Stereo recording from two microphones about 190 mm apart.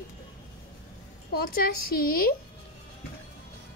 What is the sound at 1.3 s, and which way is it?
A woman's voice, 50° left (ahead or behind).